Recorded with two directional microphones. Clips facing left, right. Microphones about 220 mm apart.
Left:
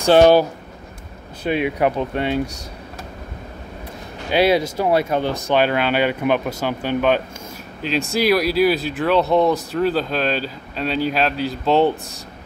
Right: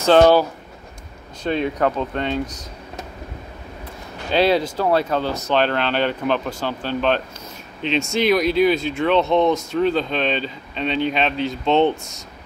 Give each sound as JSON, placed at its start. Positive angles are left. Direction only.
{"t": 0.0, "sound": "speech", "side_deg": 15}
{"t": 4.3, "sound": "speech", "side_deg": 10}
{"t": 9.5, "sound": "speech", "side_deg": 35}
{"t": 9.8, "sound": "speech", "side_deg": 5}